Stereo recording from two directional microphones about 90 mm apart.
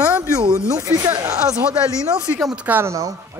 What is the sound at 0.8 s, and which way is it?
Speech, 35° right (ahead or behind).